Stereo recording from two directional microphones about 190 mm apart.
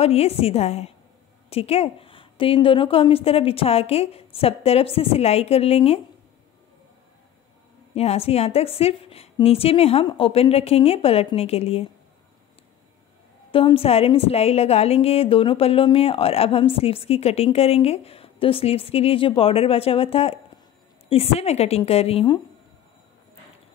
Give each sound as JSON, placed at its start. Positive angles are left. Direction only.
{"t": 0.0, "sound": "a woman's voice", "side_deg": 35}
{"t": 7.9, "sound": "a woman's voice", "side_deg": 35}
{"t": 13.5, "sound": "a woman's voice", "side_deg": 30}